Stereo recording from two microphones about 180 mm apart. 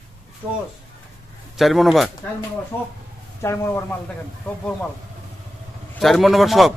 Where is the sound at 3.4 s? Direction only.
15° left (ahead or behind).